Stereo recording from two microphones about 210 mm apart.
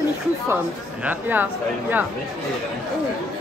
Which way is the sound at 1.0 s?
10° right (ahead or behind).